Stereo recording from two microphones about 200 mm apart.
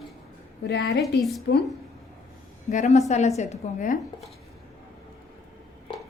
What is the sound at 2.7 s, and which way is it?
A woman's voice, 35° left (ahead or behind).